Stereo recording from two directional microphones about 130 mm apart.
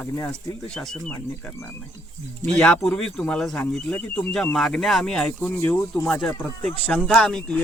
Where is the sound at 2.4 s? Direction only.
5° left (ahead or behind).